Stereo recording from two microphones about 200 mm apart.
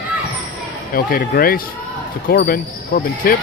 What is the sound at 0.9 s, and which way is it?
Speech, 45° left (ahead or behind).